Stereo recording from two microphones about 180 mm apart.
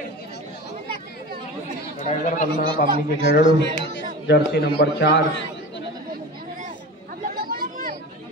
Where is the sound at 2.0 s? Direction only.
45° left (ahead or behind).